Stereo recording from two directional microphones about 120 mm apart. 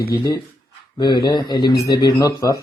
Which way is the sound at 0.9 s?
35° left (ahead or behind).